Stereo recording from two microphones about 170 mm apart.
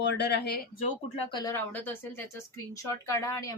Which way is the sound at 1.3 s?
25° left (ahead or behind).